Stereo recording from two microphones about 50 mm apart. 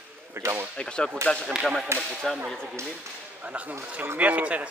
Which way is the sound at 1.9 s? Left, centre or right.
Right.